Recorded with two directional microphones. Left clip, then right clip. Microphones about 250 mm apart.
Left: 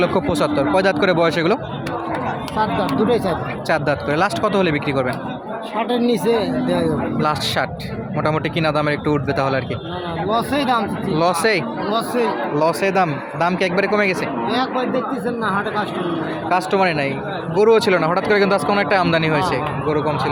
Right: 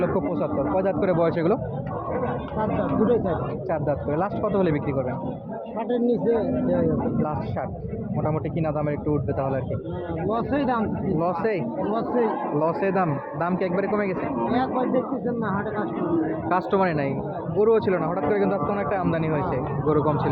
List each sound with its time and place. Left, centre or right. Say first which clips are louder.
0.0 s speech: left 7 dB; left
2.8 s speech: left 4 dB; left
3.7 s speech: left 7 dB; centre
5.7 s speech: left 5 dB; left
7.3 s speech: left 10 dB; left
12.5 s speech: left 7 dB; centre
16.5 s speech: left 6 dB; centre
19.9 s speech: left 2 dB; centre